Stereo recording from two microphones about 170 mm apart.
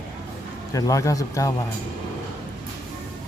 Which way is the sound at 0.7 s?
20° left (ahead or behind).